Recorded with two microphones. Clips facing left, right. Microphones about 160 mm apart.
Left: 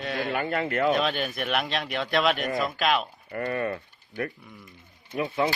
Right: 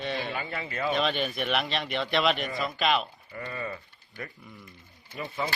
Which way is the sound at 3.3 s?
60° left (ahead or behind).